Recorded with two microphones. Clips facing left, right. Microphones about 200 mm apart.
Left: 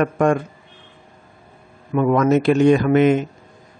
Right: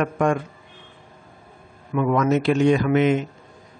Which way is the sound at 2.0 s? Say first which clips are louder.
Left 4 dB; 45° left (ahead or behind).